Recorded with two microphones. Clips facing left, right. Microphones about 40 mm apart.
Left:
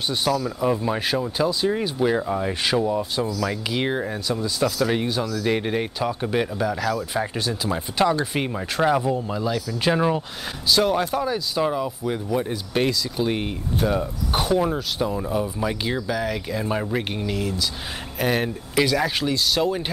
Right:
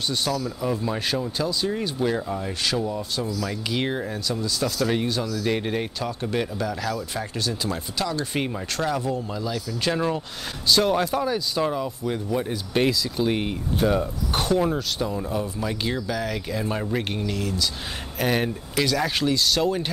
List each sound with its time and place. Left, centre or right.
0.1 s speech: centre
10.7 s speech: centre